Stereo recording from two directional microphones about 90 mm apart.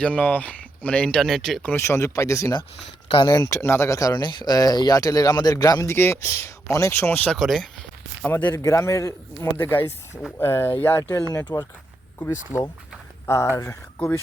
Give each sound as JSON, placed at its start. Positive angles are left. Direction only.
{"t": 0.0, "sound": "speech", "side_deg": 15}
{"t": 1.7, "sound": "a man's voice", "side_deg": 30}
{"t": 3.2, "sound": "speech", "side_deg": 50}
{"t": 3.5, "sound": "a man's voice", "side_deg": 30}
{"t": 4.2, "sound": "speech", "side_deg": 60}
{"t": 4.5, "sound": "speech", "side_deg": 45}
{"t": 5.9, "sound": "speech", "side_deg": 25}
{"t": 7.3, "sound": "speech", "side_deg": 0}
{"t": 8.2, "sound": "speech", "side_deg": 20}
{"t": 8.5, "sound": "a man's voice", "side_deg": 35}
{"t": 9.6, "sound": "speech", "side_deg": 25}
{"t": 11.3, "sound": "speech", "side_deg": 45}
{"t": 12.2, "sound": "a man's voice", "side_deg": 30}